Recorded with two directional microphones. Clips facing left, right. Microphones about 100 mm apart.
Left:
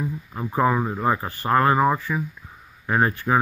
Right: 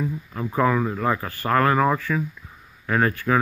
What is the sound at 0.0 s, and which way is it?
Speech, 20° left (ahead or behind).